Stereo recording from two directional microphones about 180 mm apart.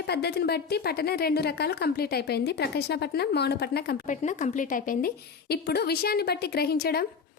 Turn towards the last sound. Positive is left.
turn(degrees=60)  # may be behind; listen again after turning